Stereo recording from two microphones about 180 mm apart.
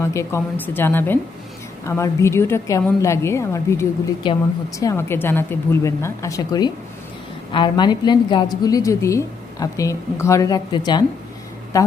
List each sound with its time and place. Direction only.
0.0 s a woman's voice: 15° left (ahead or behind)